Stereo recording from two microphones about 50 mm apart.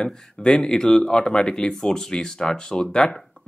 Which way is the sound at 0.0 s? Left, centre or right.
Centre.